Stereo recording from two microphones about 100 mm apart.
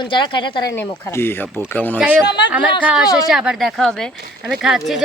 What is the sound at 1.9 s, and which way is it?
Speech, 15° right (ahead or behind).